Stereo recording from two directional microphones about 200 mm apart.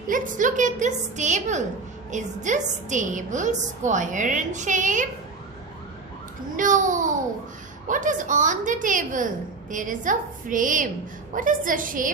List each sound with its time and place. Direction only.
0.1 s a woman's voice: 40° right (ahead or behind)
6.6 s a woman's voice: 40° right (ahead or behind)